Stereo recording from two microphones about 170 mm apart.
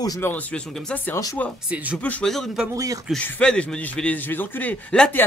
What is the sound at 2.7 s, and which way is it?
Speech, 20° right (ahead or behind).